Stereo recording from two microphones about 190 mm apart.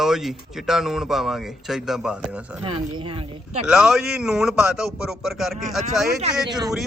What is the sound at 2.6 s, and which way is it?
Speech, 25° right (ahead or behind).